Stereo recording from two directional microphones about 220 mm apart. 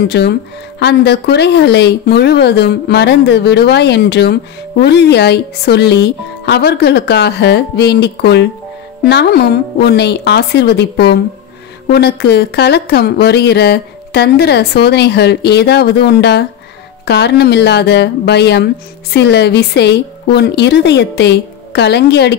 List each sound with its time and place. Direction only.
0.1 s speech: 50° left (ahead or behind)